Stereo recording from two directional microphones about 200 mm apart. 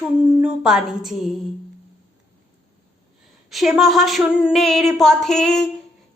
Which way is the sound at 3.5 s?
Centre (ahead or behind).